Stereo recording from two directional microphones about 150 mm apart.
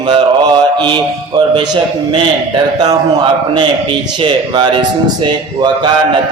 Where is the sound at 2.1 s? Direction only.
30° right (ahead or behind).